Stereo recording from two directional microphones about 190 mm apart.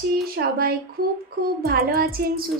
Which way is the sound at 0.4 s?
50° right (ahead or behind).